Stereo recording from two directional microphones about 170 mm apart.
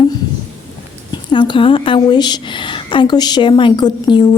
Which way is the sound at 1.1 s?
30° left (ahead or behind).